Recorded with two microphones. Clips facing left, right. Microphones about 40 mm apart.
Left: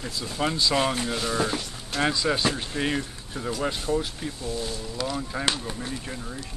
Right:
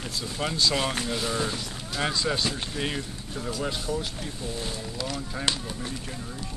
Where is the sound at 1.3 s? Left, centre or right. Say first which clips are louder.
Left 3 dB; centre.